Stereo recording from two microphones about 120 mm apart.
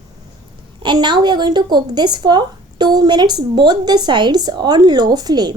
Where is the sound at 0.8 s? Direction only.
40° right (ahead or behind).